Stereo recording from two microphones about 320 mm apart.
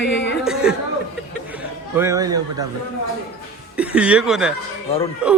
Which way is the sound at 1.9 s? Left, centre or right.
Centre.